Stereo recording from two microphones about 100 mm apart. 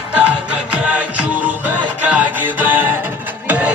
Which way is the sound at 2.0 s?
15° right (ahead or behind).